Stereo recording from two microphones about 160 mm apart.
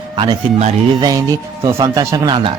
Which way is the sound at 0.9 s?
25° right (ahead or behind).